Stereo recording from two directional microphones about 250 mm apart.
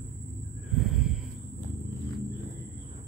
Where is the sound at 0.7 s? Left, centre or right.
Centre.